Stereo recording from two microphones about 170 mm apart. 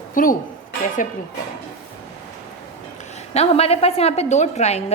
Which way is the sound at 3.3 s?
35° left (ahead or behind).